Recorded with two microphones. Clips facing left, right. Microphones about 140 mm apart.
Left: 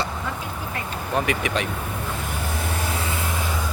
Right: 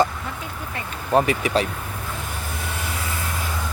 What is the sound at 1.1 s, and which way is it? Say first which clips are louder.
Speech: right 5 dB; 35° right (ahead or behind).